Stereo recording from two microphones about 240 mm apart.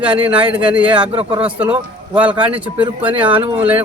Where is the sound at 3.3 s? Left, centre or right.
Right.